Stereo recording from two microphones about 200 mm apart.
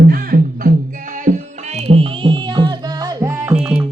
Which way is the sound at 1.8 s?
30° right (ahead or behind).